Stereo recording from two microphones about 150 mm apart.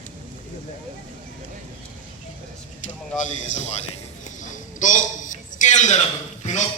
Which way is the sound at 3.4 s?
55° left (ahead or behind).